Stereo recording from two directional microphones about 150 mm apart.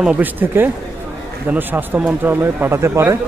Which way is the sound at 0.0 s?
10° right (ahead or behind).